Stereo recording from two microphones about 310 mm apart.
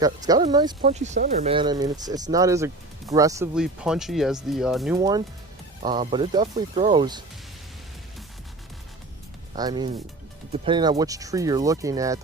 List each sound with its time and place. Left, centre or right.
0.0 s speech: centre
9.6 s speech: centre